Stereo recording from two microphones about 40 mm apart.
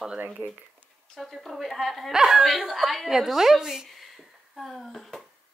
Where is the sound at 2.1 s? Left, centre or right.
Centre.